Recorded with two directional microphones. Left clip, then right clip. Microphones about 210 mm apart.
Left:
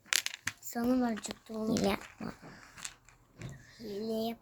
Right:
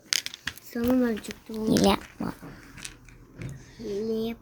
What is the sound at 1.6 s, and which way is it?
Speech, 20° right (ahead or behind).